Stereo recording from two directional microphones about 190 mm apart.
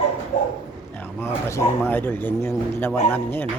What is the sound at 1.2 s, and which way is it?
A man's voice, 15° left (ahead or behind).